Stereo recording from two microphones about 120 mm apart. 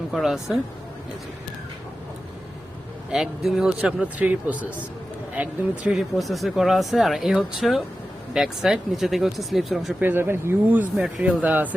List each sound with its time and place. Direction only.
0.1 s speech: centre (ahead or behind)
3.1 s speech: 5° right (ahead or behind)
5.9 s speech: centre (ahead or behind)
10.0 s speech: 20° right (ahead or behind)
10.9 s speech: 5° right (ahead or behind)